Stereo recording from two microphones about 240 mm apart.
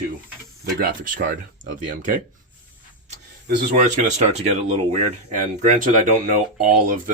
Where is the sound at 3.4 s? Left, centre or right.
Right.